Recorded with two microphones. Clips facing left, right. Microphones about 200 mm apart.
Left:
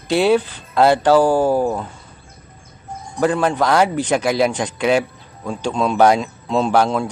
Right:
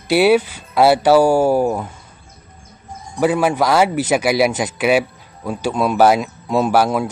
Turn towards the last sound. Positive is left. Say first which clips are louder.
# right 1 dB
turn(degrees=-10)  # may be behind; listen again after turning